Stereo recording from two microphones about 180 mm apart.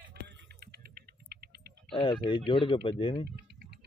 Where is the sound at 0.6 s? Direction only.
60° right (ahead or behind).